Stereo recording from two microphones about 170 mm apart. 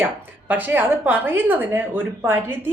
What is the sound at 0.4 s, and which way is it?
A woman's voice, 10° right (ahead or behind).